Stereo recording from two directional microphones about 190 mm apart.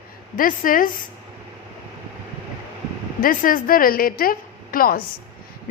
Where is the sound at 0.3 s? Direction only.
45° left (ahead or behind).